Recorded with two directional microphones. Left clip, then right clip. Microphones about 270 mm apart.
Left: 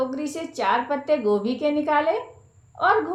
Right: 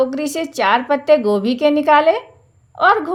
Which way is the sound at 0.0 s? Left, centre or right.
Right.